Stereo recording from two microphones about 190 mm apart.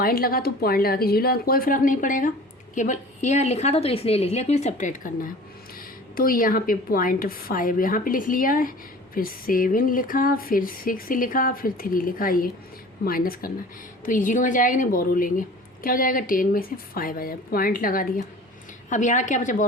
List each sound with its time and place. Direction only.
0.0 s a woman's voice: 50° left (ahead or behind)